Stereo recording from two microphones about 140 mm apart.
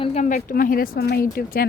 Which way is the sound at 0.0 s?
55° left (ahead or behind).